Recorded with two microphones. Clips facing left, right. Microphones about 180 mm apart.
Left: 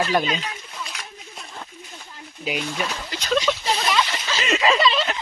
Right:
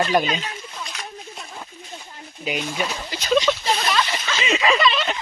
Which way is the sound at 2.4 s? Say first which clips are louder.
Right 1 dB; centre (ahead or behind).